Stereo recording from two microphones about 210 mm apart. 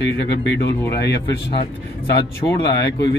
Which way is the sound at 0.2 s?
55° left (ahead or behind).